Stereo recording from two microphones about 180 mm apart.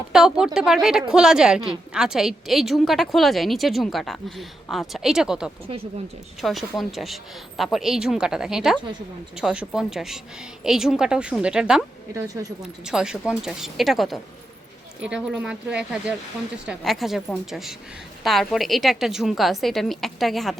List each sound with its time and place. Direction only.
0.1 s a woman's voice: 5° right (ahead or behind)
12.1 s speech: 20° right (ahead or behind)
12.8 s a woman's voice: 5° right (ahead or behind)